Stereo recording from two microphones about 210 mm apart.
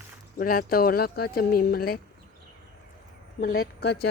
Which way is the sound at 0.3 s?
45° left (ahead or behind).